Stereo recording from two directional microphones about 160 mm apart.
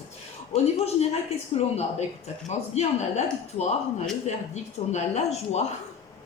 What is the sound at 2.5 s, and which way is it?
Speech, 45° left (ahead or behind).